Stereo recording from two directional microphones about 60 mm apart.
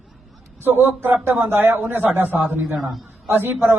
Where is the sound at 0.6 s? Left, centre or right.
Right.